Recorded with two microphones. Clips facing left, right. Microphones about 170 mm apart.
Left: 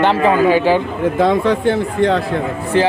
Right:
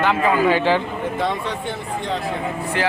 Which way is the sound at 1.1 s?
90° left.